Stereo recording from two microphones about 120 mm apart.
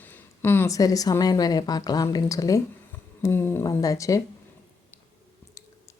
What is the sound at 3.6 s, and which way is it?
Speech, 30° left (ahead or behind).